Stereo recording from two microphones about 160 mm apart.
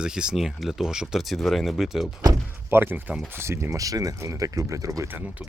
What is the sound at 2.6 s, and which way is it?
Speech, 15° right (ahead or behind).